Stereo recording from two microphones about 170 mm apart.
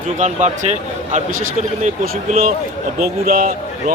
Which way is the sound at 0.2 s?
45° right (ahead or behind).